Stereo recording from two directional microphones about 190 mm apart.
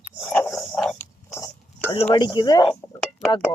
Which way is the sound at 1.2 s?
15° left (ahead or behind).